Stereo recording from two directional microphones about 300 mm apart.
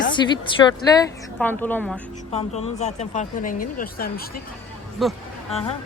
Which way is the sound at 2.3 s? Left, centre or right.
Left.